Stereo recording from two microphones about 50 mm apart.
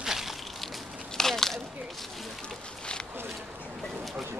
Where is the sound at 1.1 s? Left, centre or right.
Centre.